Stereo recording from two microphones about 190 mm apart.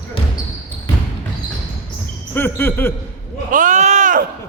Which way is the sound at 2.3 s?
10° left (ahead or behind).